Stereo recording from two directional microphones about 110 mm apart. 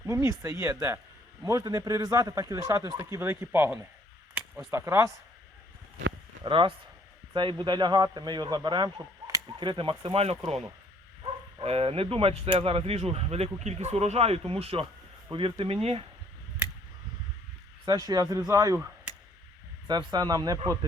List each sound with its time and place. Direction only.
0.0 s a man's voice: 25° right (ahead or behind)
6.4 s a man's voice: 50° right (ahead or behind)
17.8 s a man's voice: 35° right (ahead or behind)
19.9 s a man's voice: 40° right (ahead or behind)